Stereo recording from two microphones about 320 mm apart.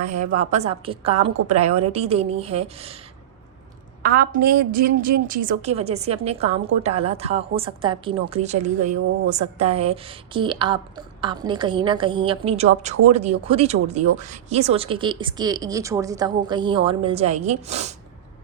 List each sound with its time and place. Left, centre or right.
0.3 s a woman's voice: right
4.0 s a woman's voice: right